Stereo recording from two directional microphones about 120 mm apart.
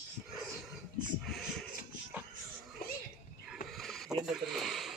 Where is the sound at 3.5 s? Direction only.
Centre (ahead or behind).